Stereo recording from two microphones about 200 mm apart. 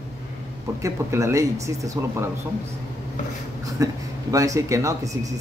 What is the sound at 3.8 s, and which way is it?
Speech, 15° right (ahead or behind).